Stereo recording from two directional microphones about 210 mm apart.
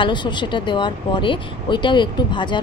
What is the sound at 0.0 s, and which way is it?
Speech, 20° left (ahead or behind).